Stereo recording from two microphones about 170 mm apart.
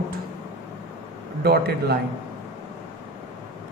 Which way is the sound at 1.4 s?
70° right (ahead or behind).